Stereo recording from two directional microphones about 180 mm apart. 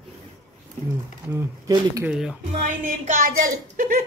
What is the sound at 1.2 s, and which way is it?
Speech, 15° right (ahead or behind).